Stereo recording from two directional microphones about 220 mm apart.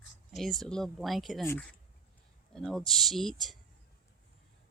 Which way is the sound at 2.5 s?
Centre (ahead or behind).